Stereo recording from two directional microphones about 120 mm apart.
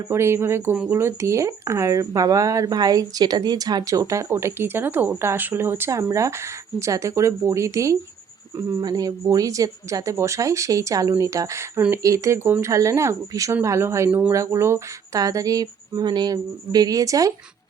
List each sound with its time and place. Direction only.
0.1 s speech: 20° right (ahead or behind)